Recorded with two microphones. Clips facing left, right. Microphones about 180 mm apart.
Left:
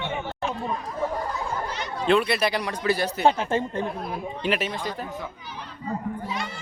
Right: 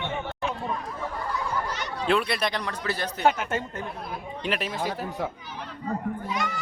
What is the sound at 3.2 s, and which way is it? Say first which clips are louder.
Speech: left 1 dB; 30° left (ahead or behind).